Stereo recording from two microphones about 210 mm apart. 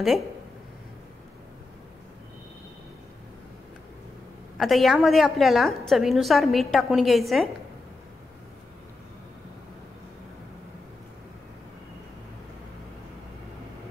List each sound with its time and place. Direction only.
4.6 s a woman's voice: centre (ahead or behind)